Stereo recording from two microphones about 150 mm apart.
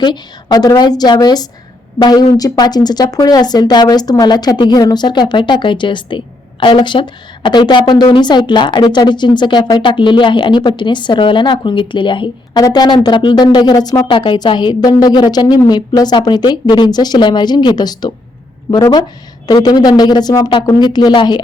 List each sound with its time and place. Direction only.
0.0 s speech: 30° left (ahead or behind)